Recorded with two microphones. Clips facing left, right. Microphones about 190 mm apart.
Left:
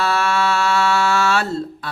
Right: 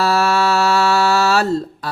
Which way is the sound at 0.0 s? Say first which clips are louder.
Right 3 dB; 35° right (ahead or behind).